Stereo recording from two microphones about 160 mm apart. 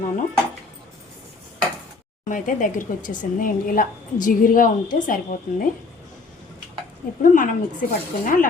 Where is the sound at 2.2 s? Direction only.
55° left (ahead or behind).